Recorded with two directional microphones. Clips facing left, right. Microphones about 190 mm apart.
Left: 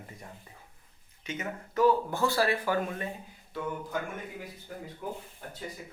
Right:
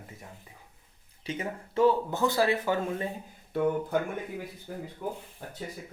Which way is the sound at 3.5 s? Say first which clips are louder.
Right 9 dB; 55° right (ahead or behind).